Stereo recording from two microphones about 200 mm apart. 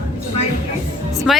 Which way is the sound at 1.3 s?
Centre (ahead or behind).